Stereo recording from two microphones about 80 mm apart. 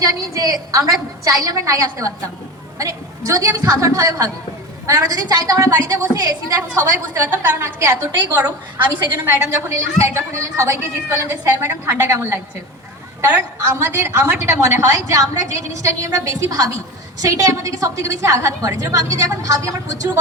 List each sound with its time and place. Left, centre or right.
0.0 s a woman's voice: right
7.2 s a woman's voice: right
8.9 s a woman's voice: right
9.2 s a woman's voice: right